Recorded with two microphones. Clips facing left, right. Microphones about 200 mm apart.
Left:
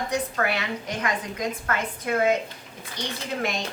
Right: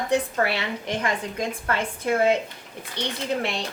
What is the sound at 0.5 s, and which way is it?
A woman's voice, 30° right (ahead or behind).